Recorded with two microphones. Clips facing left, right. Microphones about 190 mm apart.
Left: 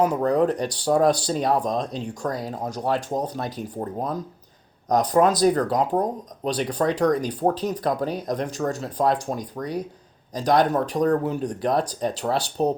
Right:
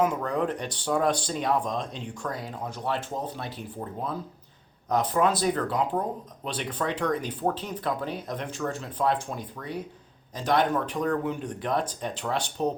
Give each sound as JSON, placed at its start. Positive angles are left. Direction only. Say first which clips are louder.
{"t": 0.0, "sound": "speech", "louder": "left 6 dB", "side_deg": 35}